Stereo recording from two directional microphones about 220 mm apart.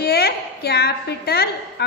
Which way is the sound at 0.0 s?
45° left (ahead or behind).